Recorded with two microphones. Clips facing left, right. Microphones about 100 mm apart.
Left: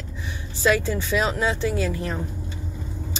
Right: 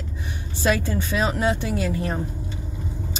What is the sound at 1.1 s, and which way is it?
A woman's voice, 25° right (ahead or behind).